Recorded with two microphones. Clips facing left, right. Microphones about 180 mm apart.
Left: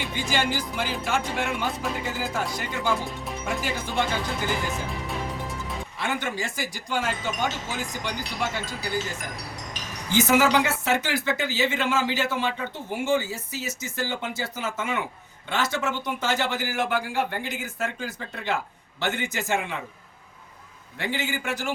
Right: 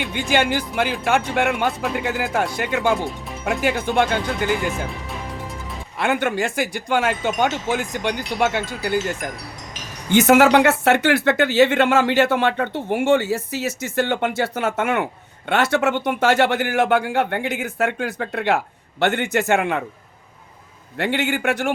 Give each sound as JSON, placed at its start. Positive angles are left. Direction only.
{"t": 0.0, "sound": "speech", "side_deg": -60}
{"t": 6.0, "sound": "speech", "side_deg": -60}
{"t": 21.0, "sound": "speech", "side_deg": -65}